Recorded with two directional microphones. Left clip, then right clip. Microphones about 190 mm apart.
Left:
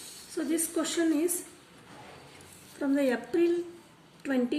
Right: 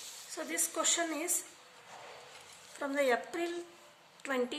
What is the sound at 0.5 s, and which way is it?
Speech, 35° right (ahead or behind).